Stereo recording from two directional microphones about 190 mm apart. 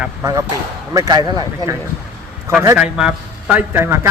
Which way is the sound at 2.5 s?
5° right (ahead or behind).